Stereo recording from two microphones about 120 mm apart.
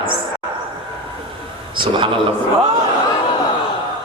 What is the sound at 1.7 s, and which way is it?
Speech, 45° right (ahead or behind).